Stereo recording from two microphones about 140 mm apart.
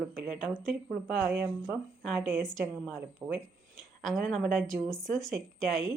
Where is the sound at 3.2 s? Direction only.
10° right (ahead or behind).